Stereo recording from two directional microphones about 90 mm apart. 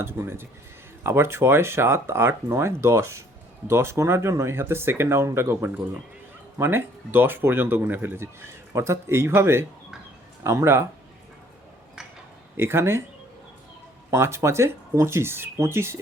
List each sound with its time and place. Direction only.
0.0 s speech: 30° right (ahead or behind)
12.5 s speech: 25° right (ahead or behind)
14.1 s speech: 30° right (ahead or behind)